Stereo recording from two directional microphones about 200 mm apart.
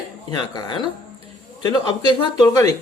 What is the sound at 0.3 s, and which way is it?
Speech, 20° left (ahead or behind).